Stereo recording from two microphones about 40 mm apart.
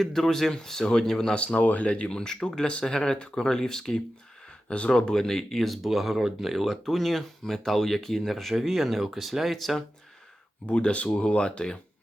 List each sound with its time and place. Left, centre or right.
0.0 s speech: centre
1.5 s speech: left
2.1 s speech: centre
10.7 s speech: left